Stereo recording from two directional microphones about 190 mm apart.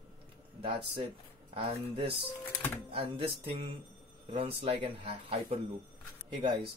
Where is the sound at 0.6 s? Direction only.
30° right (ahead or behind).